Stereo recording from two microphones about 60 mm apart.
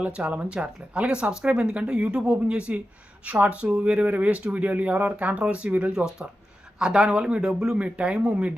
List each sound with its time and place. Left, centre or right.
0.0 s speech: right
6.7 s speech: centre